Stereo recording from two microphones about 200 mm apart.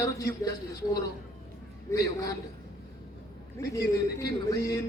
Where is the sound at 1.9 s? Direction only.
15° left (ahead or behind).